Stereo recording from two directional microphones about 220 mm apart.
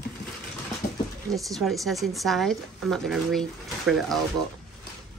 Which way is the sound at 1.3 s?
Centre (ahead or behind).